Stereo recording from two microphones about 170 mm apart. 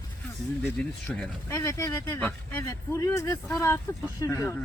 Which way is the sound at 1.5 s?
20° left (ahead or behind).